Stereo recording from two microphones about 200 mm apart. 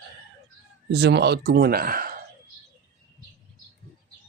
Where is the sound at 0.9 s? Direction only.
55° right (ahead or behind).